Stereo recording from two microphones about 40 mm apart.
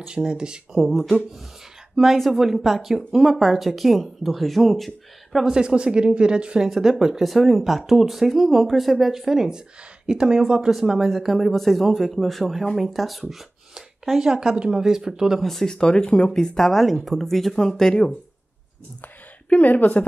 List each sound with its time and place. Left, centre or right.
0.0 s speech: centre
0.7 s speech: centre
2.3 s speech: centre
5.4 s speech: centre
6.7 s speech: centre
13.3 s a sound: centre
14.3 s speech: right
15.4 s speech: centre
19.5 s speech: left